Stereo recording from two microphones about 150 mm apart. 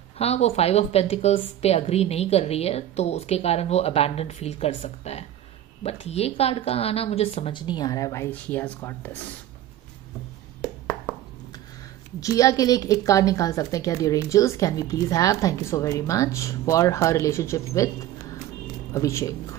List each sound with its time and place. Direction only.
0.2 s a woman's voice: 40° left (ahead or behind); by 9.2 s 15° left (ahead or behind)
12.2 s a woman's voice: 20° left (ahead or behind)